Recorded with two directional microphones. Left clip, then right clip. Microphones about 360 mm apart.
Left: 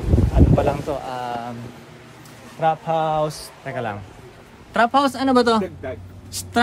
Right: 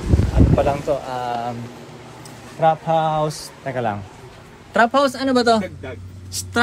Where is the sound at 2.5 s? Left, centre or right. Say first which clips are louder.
Right 3 dB; centre.